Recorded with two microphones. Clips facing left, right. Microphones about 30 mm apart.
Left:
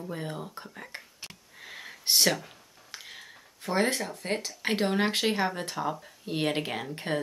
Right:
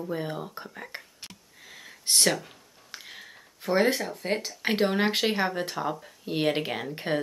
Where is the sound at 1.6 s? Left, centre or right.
Left.